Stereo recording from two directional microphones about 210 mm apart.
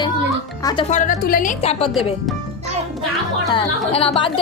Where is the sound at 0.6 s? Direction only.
20° left (ahead or behind).